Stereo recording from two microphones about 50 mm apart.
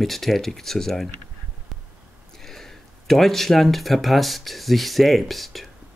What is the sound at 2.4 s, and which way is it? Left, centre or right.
Speech, centre.